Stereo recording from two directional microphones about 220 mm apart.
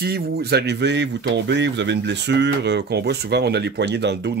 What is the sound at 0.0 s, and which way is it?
Speech, 45° right (ahead or behind).